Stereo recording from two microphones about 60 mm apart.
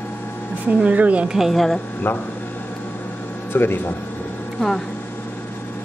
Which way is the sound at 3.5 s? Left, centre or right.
Left.